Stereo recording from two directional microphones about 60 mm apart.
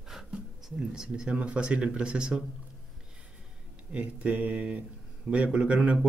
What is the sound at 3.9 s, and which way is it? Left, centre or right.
Speech, right.